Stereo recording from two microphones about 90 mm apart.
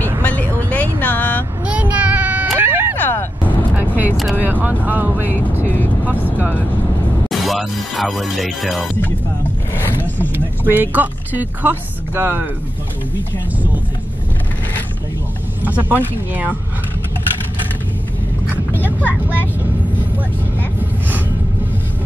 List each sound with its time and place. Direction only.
0.2 s vehicle: 20° left (ahead or behind)
0.7 s a sound: 15° left (ahead or behind)
1.7 s baby cry: 15° right (ahead or behind)
2.5 s vehicle: 25° right (ahead or behind)
3.0 s vehicle: 20° left (ahead or behind)
3.7 s vehicle: 20° right (ahead or behind)
5.3 s vehicle: 20° left (ahead or behind)
6.0 s vehicle: 15° right (ahead or behind)
7.2 s music: centre (ahead or behind)
9.8 s a sound: 25° left (ahead or behind)
10.3 s speech: 20° right (ahead or behind)
15.6 s speech: 20° right (ahead or behind)
18.5 s vehicle: 20° left (ahead or behind)
18.9 s vehicle: 15° right (ahead or behind)